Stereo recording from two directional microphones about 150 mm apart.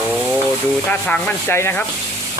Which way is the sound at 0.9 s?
10° left (ahead or behind).